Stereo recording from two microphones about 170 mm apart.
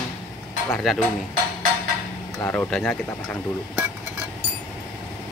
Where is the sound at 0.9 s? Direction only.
Centre (ahead or behind).